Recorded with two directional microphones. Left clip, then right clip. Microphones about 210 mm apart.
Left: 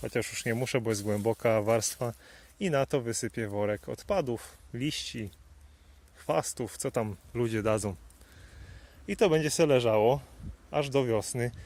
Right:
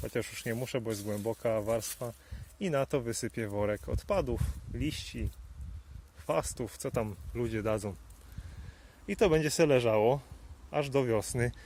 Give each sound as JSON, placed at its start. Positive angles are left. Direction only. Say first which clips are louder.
{"t": 0.0, "sound": "speech", "louder": "left 4 dB", "side_deg": 15}
{"t": 2.6, "sound": "speech", "louder": "left 3 dB", "side_deg": 15}
{"t": 9.0, "sound": "speech", "louder": "left 2 dB", "side_deg": 10}